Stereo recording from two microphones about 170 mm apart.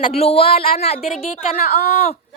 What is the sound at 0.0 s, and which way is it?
Speech, 35° left (ahead or behind).